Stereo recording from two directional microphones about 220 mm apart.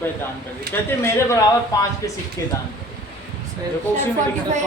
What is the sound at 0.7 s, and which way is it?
Speech, 45° right (ahead or behind).